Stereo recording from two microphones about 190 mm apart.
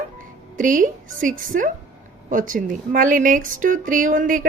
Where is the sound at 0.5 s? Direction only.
45° right (ahead or behind).